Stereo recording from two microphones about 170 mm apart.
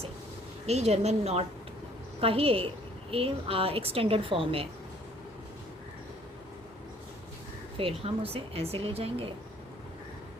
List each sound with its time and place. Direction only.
0.7 s speech: 40° right (ahead or behind)
7.8 s speech: 35° right (ahead or behind)